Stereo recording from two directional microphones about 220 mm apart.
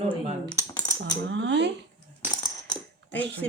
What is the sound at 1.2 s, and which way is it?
Speech, 55° right (ahead or behind).